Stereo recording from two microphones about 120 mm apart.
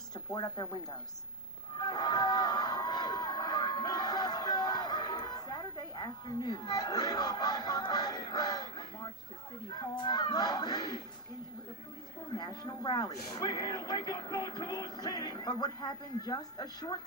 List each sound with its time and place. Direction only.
0.1 s speech: 35° left (ahead or behind)
1.8 s a sound: 35° left (ahead or behind)
9.9 s speech: 40° left (ahead or behind)
12.4 s speech: 35° left (ahead or behind)